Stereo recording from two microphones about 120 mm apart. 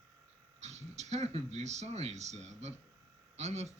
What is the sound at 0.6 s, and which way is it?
Speech, 70° right (ahead or behind).